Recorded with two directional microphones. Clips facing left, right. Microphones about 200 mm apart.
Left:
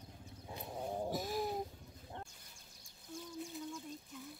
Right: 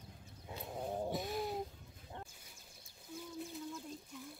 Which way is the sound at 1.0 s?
Centre (ahead or behind).